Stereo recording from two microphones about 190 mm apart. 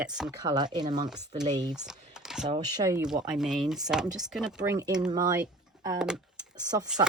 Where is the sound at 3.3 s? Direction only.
5° right (ahead or behind).